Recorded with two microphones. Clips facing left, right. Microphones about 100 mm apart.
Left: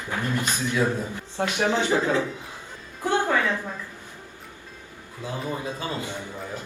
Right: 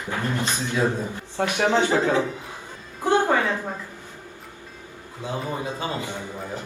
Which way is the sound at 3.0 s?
20° right (ahead or behind).